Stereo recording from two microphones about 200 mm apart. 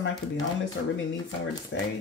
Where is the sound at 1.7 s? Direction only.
60° left (ahead or behind).